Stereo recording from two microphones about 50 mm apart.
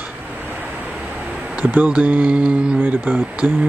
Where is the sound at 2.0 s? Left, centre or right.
Right.